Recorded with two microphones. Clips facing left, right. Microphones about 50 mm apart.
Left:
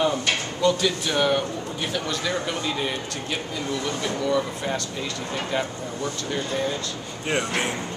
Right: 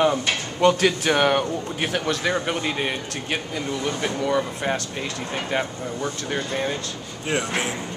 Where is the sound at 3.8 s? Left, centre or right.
Right.